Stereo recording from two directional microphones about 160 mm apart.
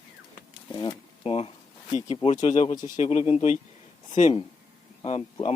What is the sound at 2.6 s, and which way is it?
Speech, 25° left (ahead or behind).